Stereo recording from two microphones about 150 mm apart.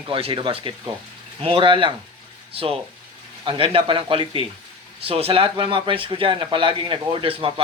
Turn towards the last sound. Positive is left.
turn(degrees=-35)  # may be behind; listen again after turning